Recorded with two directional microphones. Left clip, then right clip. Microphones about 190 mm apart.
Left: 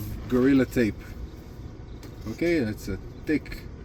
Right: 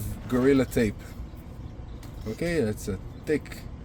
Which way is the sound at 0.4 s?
50° right (ahead or behind).